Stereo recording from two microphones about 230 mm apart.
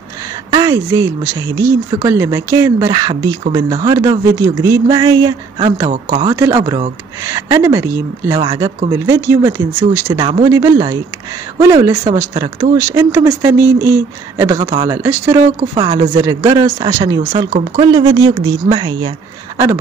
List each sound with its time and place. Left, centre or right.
0.5 s speech: centre